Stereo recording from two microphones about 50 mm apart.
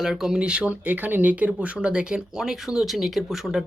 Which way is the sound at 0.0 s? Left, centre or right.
Centre.